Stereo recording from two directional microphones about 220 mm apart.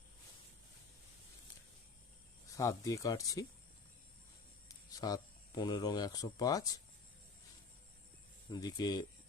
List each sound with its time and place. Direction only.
2.5 s speech: 15° left (ahead or behind)
4.9 s speech: 15° left (ahead or behind)
8.4 s speech: 20° left (ahead or behind)